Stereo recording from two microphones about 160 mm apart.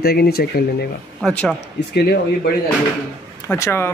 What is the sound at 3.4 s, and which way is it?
Speech, 15° left (ahead or behind).